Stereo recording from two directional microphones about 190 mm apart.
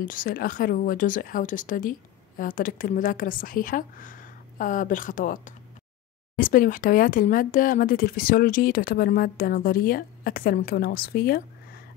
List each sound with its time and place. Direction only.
0.0 s speech: 45° left (ahead or behind)